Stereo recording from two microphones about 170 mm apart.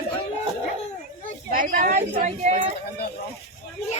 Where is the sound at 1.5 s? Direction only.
55° right (ahead or behind).